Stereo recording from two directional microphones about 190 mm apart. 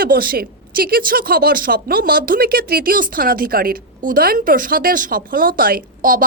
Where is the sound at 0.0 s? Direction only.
50° right (ahead or behind).